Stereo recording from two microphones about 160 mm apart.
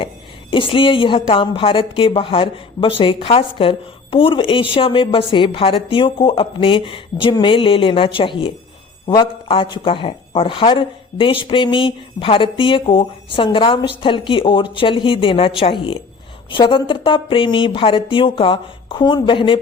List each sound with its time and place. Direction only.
0.5 s a woman's voice: 30° left (ahead or behind)